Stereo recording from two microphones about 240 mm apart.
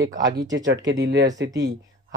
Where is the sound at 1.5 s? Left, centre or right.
Centre.